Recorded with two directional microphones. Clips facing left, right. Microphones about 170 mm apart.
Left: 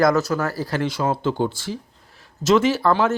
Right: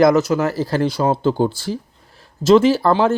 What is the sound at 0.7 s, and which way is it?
Speech, 35° right (ahead or behind).